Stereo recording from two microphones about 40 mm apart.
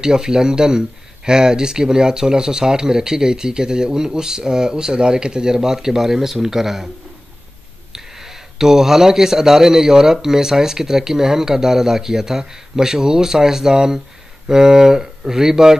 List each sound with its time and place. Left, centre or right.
0.0 s speech: centre
7.9 s speech: centre